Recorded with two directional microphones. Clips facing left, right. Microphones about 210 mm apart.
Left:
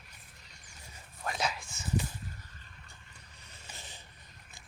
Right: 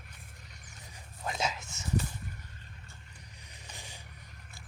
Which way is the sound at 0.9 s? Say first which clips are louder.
Right 1 dB; 20° right (ahead or behind).